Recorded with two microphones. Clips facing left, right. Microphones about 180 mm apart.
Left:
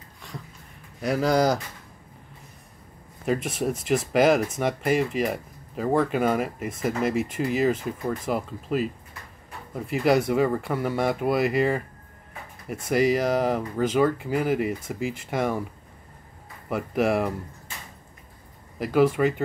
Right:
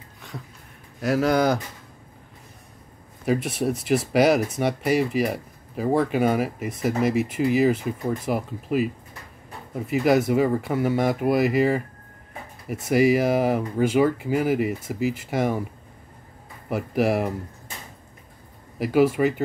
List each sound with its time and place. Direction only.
1.0 s speech: 5° right (ahead or behind)
3.3 s speech: 5° right (ahead or behind)
12.8 s speech: 5° right (ahead or behind)
16.6 s speech: 5° right (ahead or behind)
18.8 s speech: 5° right (ahead or behind)